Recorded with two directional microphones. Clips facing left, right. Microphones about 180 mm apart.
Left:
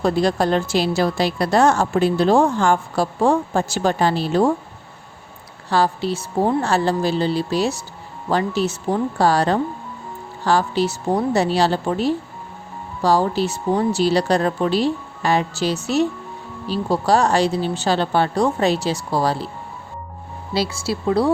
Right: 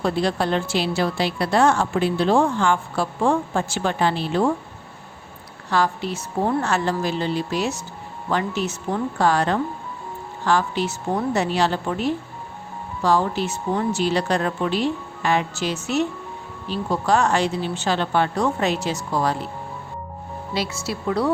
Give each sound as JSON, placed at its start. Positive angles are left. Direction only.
{"t": 0.0, "sound": "a woman's voice", "side_deg": 40}
{"t": 5.7, "sound": "a woman's voice", "side_deg": 30}
{"t": 20.5, "sound": "a woman's voice", "side_deg": 30}